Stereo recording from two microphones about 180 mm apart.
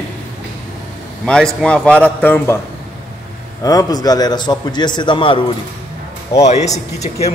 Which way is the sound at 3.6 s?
20° left (ahead or behind).